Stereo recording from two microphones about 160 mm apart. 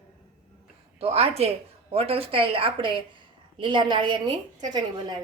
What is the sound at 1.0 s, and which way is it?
A woman's voice, 40° right (ahead or behind).